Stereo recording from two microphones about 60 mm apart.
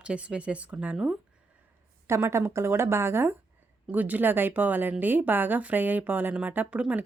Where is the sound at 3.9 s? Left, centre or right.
Right.